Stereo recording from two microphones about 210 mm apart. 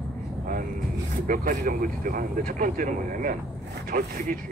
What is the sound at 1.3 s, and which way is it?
A man's voice, 40° right (ahead or behind).